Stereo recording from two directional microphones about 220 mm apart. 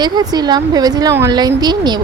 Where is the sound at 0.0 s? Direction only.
20° right (ahead or behind).